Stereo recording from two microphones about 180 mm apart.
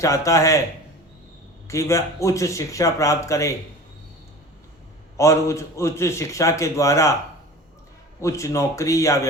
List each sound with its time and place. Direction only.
0.0 s a man's voice: 20° left (ahead or behind)
1.6 s a man's voice: 15° left (ahead or behind)
5.1 s a man's voice: 15° left (ahead or behind)
8.2 s a man's voice: 15° left (ahead or behind)